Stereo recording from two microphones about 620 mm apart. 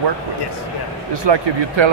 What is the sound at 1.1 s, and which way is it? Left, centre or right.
Speech, right.